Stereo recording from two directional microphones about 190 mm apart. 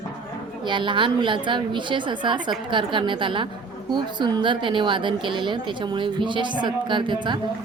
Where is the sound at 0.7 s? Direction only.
25° right (ahead or behind).